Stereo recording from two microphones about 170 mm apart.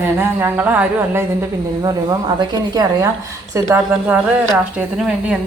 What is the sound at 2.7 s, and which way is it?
A woman's voice, 20° right (ahead or behind).